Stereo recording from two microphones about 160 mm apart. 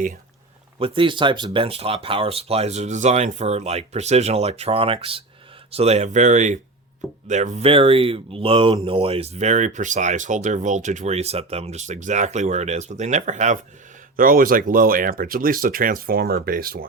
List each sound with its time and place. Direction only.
0.8 s speech: 35° right (ahead or behind)
14.2 s speech: 65° right (ahead or behind)